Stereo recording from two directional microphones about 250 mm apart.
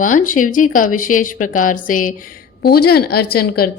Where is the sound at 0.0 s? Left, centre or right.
Left.